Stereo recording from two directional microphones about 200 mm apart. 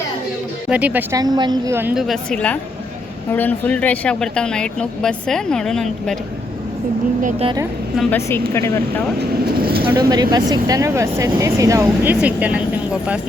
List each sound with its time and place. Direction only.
0.7 s speech: 5° right (ahead or behind)
7.2 s speech: 40° right (ahead or behind)
7.4 s a woman's voice: 20° right (ahead or behind)
8.5 s speech: 15° left (ahead or behind)
9.6 s vehicle: 50° right (ahead or behind)
9.8 s speech: 20° right (ahead or behind)